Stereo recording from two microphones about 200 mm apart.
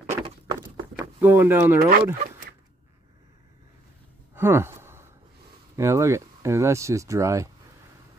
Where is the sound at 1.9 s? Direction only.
50° right (ahead or behind).